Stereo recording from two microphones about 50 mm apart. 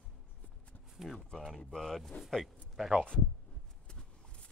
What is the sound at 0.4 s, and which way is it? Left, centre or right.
Horse, left.